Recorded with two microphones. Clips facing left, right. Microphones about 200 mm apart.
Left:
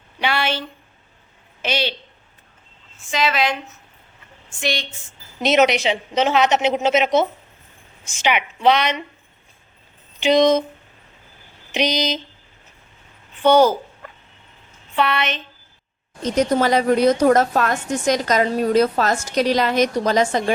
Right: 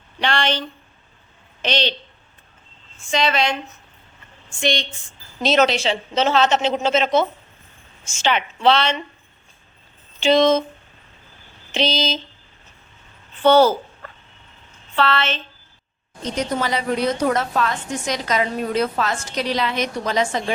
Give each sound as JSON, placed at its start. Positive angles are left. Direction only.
{"t": 0.2, "sound": "a woman's voice", "side_deg": 10}
{"t": 1.6, "sound": "a woman's voice", "side_deg": 10}
{"t": 3.0, "sound": "a woman's voice", "side_deg": 0}
{"t": 4.6, "sound": "a woman's voice", "side_deg": 5}
{"t": 5.0, "sound": "a woman's voice", "side_deg": 20}
{"t": 10.2, "sound": "speech", "side_deg": 15}
{"t": 11.7, "sound": "a woman's voice", "side_deg": 15}
{"t": 13.3, "sound": "a sound", "side_deg": 10}
{"t": 14.9, "sound": "a woman's voice", "side_deg": 15}
{"t": 16.2, "sound": "a woman's voice", "side_deg": 45}